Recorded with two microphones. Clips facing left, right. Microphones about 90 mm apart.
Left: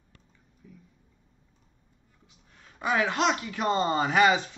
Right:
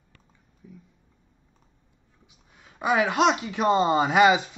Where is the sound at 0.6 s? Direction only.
15° right (ahead or behind).